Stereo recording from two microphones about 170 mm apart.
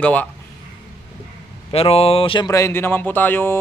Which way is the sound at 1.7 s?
35° left (ahead or behind).